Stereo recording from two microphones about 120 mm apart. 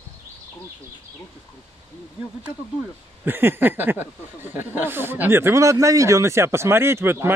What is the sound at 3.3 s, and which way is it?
Speech, 20° right (ahead or behind).